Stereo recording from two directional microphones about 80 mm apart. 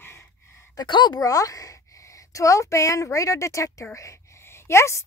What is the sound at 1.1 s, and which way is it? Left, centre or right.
A woman's voice, left.